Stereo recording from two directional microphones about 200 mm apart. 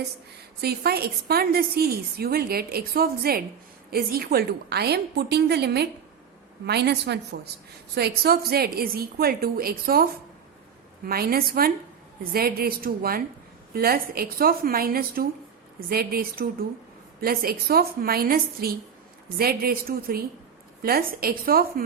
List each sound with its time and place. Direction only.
0.6 s a woman's voice: 50° right (ahead or behind)